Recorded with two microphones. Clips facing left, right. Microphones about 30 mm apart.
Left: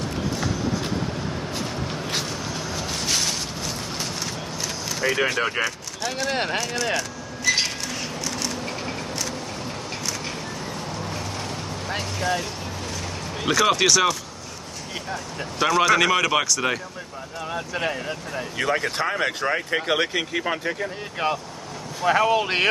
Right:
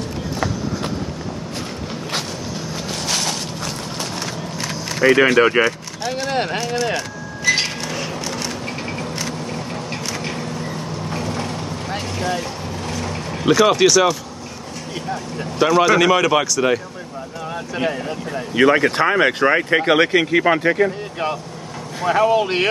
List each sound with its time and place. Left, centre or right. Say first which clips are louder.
5.0 s speech: right 10 dB; right
6.0 s speech: right 3 dB; centre
6.3 s speech: right 4 dB; centre
6.6 s vehicle: right 4 dB; centre
7.5 s a sound: right 3 dB; right
11.9 s speech: right 1 dB; centre
13.5 s speech: right 5 dB; centre
18.6 s speech: right 10 dB; right
19.0 s speech: right 8 dB; right
22.0 s speech: right 3 dB; centre